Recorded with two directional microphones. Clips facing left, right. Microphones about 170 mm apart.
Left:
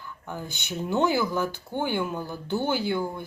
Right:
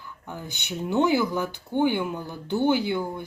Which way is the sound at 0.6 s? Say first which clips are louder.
Right 2 dB; 15° right (ahead or behind).